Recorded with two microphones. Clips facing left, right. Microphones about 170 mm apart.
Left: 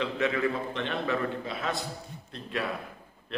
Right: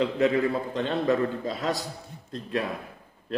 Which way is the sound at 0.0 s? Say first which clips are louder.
Right 5 dB; 35° right (ahead or behind).